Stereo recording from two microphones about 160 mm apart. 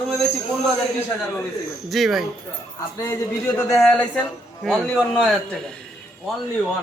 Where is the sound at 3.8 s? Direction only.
5° left (ahead or behind).